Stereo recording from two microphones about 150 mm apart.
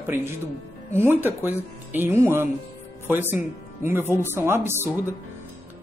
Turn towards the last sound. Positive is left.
turn(degrees=-15)  # may be behind; listen again after turning